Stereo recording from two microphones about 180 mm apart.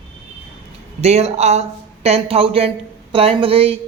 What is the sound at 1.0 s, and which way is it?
A woman's voice, 35° right (ahead or behind).